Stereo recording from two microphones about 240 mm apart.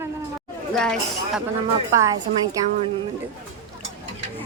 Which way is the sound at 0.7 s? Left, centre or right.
Centre.